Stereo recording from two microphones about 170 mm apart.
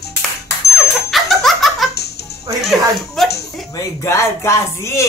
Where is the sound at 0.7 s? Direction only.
Centre (ahead or behind).